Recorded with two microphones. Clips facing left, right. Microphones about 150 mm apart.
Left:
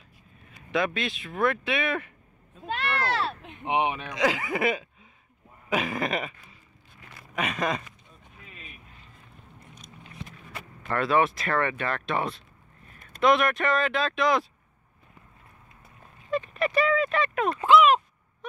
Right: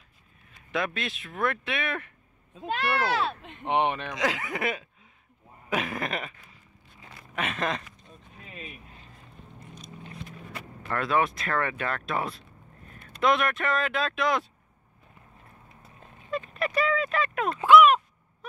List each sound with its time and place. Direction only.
0.7 s speech: centre (ahead or behind)
3.3 s speech: 10° left (ahead or behind)
7.3 s speech: centre (ahead or behind)
10.9 s speech: centre (ahead or behind)
16.3 s speech: centre (ahead or behind)